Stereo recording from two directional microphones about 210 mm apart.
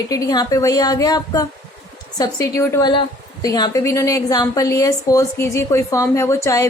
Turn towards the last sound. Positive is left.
turn(degrees=15)  # may be behind; listen again after turning